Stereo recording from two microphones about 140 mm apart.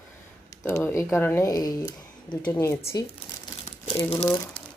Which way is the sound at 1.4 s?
25° left (ahead or behind).